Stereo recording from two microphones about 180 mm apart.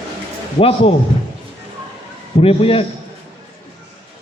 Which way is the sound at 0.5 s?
30° left (ahead or behind).